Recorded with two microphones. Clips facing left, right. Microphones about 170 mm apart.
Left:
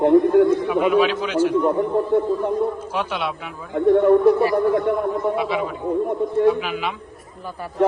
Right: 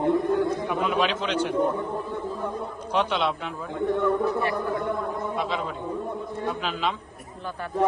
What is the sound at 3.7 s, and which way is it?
Speech, 65° left (ahead or behind).